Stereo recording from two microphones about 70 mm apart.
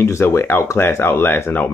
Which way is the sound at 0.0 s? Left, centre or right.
Left.